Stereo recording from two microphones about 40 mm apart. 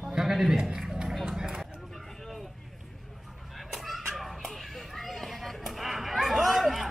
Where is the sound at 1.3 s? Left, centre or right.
Centre.